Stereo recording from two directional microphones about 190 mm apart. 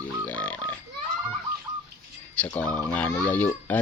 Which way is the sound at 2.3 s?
5° left (ahead or behind).